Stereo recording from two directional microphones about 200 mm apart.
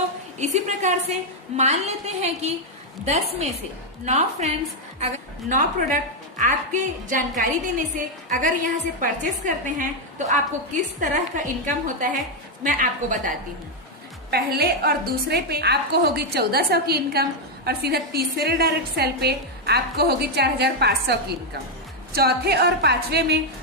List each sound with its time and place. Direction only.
0.3 s a woman's voice: 35° right (ahead or behind)
4.0 s a woman's voice: 35° right (ahead or behind)
14.3 s a woman's voice: 50° right (ahead or behind)